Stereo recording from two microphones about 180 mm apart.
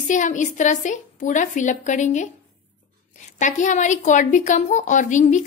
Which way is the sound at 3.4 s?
45° left (ahead or behind).